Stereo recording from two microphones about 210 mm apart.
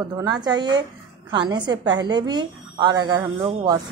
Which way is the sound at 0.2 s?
20° right (ahead or behind).